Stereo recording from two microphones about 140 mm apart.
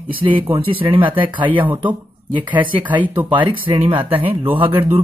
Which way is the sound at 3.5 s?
40° right (ahead or behind).